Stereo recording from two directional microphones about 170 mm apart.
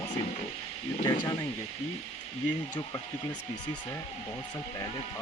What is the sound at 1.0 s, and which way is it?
Speech, 25° left (ahead or behind).